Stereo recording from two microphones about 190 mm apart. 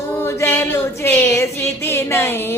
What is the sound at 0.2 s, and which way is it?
Female singing, 15° left (ahead or behind).